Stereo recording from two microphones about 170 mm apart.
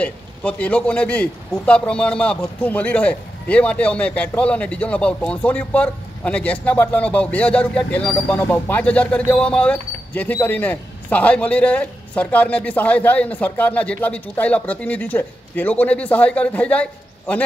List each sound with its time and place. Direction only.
0.0 s a man's voice: 10° left (ahead or behind)